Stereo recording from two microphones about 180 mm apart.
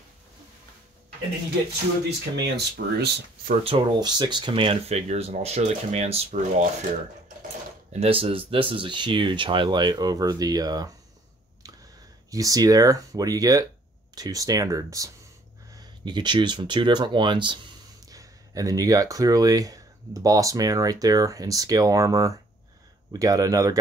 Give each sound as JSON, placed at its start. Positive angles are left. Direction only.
{"t": 2.4, "sound": "speech", "side_deg": -65}
{"t": 3.6, "sound": "speech", "side_deg": -30}
{"t": 7.9, "sound": "speech", "side_deg": -30}
{"t": 11.6, "sound": "a sound", "side_deg": -20}
{"t": 12.3, "sound": "speech", "side_deg": -20}